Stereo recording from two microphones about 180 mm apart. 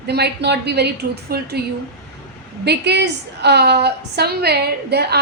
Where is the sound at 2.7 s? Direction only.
70° right (ahead or behind).